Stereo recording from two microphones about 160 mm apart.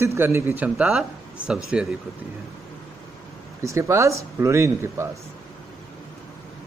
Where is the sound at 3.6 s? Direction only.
20° right (ahead or behind).